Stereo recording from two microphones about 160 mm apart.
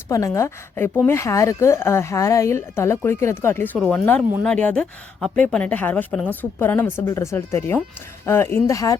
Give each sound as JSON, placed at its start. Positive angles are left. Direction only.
{"t": 0.1, "sound": "a woman's voice", "side_deg": 20}